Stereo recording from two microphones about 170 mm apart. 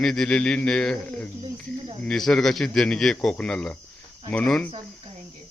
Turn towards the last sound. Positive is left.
turn(degrees=5)  # may be behind; listen again after turning